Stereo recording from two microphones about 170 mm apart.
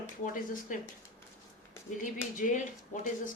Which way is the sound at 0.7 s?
55° left (ahead or behind).